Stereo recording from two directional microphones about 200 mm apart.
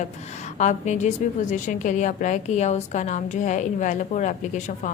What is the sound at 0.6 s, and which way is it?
A woman's voice, 35° left (ahead or behind).